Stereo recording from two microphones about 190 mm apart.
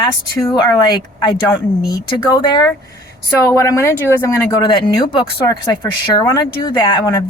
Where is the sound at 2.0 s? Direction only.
25° left (ahead or behind).